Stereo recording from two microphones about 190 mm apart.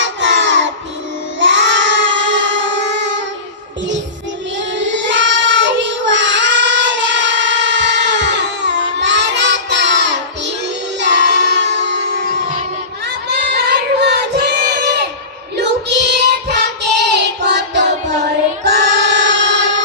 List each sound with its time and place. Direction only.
0.0 s child singing: 75° right (ahead or behind)
4.5 s child singing: 70° right (ahead or behind)
11.0 s music: 65° right (ahead or behind)
13.2 s child singing: 60° right (ahead or behind)
17.4 s singing: 65° right (ahead or behind)
18.6 s music: 60° right (ahead or behind)